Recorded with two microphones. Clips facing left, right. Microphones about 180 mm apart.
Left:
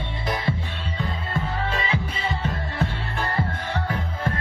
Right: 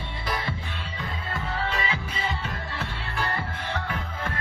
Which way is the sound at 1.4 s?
30° left (ahead or behind).